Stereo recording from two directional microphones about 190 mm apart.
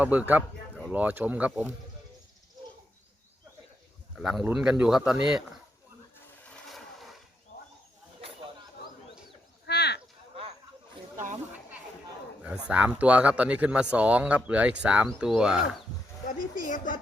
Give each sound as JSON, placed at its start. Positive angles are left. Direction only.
{"t": 0.0, "sound": "a man's voice", "side_deg": -10}
{"t": 4.2, "sound": "speech", "side_deg": -5}
{"t": 6.4, "sound": "a sound", "side_deg": 5}
{"t": 9.6, "sound": "a sound", "side_deg": 60}
{"t": 12.4, "sound": "a man's voice", "side_deg": -5}
{"t": 16.6, "sound": "a woman's voice", "side_deg": 45}